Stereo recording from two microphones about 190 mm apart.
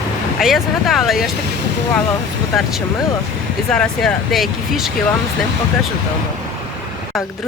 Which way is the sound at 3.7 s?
5° left (ahead or behind).